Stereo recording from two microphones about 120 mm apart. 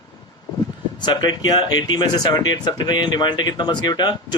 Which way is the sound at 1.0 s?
35° left (ahead or behind).